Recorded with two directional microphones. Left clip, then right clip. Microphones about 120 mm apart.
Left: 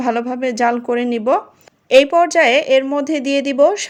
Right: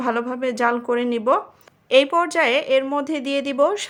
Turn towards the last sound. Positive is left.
turn(degrees=20)  # may be behind; listen again after turning